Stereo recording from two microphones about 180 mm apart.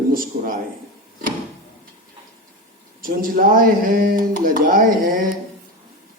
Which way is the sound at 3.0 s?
50° right (ahead or behind).